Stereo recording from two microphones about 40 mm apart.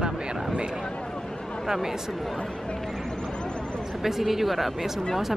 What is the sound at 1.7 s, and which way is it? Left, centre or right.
Speech, centre.